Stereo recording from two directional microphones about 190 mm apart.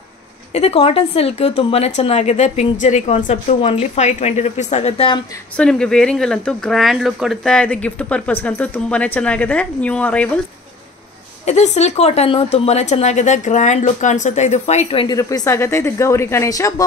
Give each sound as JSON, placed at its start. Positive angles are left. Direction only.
{"t": 0.5, "sound": "speech", "side_deg": 35}
{"t": 5.6, "sound": "speech", "side_deg": 5}
{"t": 11.4, "sound": "speech", "side_deg": 35}
{"t": 15.1, "sound": "speech", "side_deg": 15}